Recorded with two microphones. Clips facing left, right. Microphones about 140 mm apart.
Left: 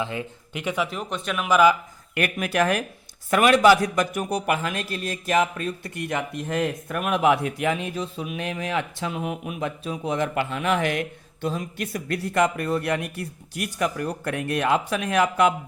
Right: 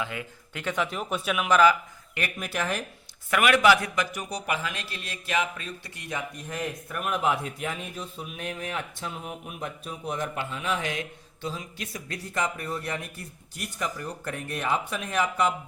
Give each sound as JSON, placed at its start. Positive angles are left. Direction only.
{"t": 0.0, "sound": "speech", "side_deg": 30}
{"t": 0.6, "sound": "speech", "side_deg": 10}
{"t": 0.9, "sound": "speech", "side_deg": -5}
{"t": 1.5, "sound": "speech", "side_deg": 10}
{"t": 2.1, "sound": "a man's voice", "side_deg": 65}
{"t": 3.2, "sound": "a man's voice", "side_deg": 35}